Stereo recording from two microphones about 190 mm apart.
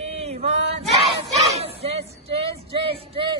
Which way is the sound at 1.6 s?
30° right (ahead or behind).